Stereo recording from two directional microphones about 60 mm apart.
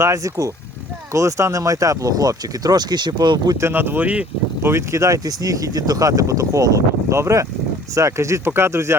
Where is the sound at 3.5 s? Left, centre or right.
Right.